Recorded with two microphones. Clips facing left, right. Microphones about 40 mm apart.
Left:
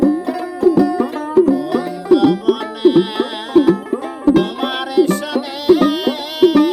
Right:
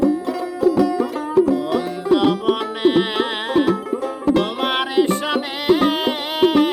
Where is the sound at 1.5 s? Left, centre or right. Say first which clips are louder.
Left 2 dB; right.